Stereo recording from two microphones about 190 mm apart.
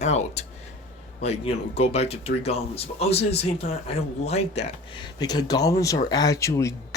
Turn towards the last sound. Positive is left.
turn(degrees=15)  # may be behind; listen again after turning